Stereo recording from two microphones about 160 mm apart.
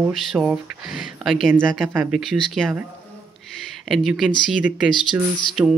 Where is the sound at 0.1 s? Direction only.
Centre (ahead or behind).